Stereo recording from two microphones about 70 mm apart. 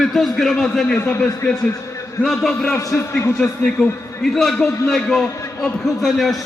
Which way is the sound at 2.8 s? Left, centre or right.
Left.